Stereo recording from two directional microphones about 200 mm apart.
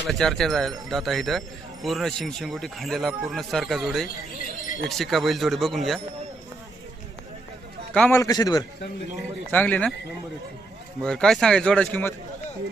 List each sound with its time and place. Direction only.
0.1 s speech: centre (ahead or behind)
7.9 s a man's voice: 10° left (ahead or behind)
9.5 s a man's voice: 10° left (ahead or behind)
11.0 s speech: 5° left (ahead or behind)